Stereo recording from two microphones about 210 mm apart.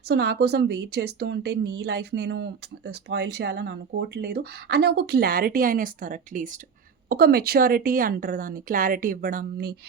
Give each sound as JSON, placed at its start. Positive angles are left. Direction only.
{"t": 0.1, "sound": "a woman's voice", "side_deg": -50}